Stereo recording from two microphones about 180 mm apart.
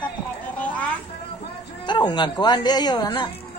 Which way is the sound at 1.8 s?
25° left (ahead or behind).